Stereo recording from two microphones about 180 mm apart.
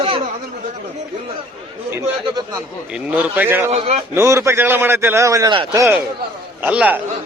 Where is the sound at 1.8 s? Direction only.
10° right (ahead or behind).